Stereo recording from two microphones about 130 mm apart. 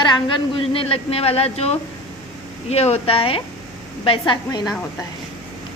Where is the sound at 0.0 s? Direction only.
35° left (ahead or behind).